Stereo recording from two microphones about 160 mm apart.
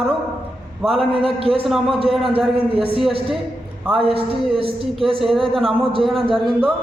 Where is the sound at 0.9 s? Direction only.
35° right (ahead or behind).